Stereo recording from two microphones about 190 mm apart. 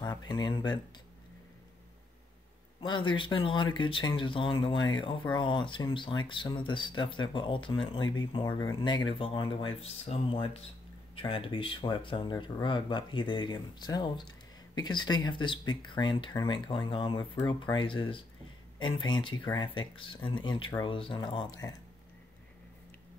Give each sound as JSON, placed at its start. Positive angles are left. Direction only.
{"t": 0.0, "sound": "speech", "side_deg": 20}
{"t": 2.8, "sound": "speech", "side_deg": 25}